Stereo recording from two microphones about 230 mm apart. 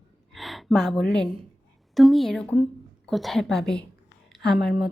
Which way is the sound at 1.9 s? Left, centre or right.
Centre.